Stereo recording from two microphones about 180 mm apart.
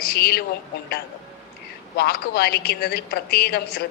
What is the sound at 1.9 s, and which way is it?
A woman's voice, 60° left (ahead or behind).